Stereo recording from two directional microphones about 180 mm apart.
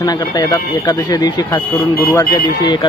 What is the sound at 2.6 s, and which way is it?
Speech, 25° left (ahead or behind).